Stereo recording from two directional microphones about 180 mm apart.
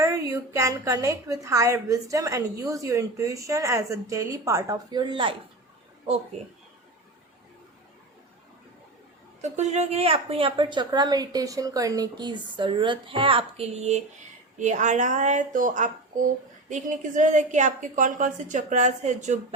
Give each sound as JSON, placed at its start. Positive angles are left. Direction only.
{"t": 0.0, "sound": "a woman's voice", "side_deg": -20}
{"t": 9.4, "sound": "a woman's voice", "side_deg": -40}